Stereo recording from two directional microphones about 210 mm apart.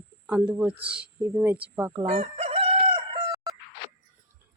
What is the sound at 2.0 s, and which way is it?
Chicken, 35° right (ahead or behind).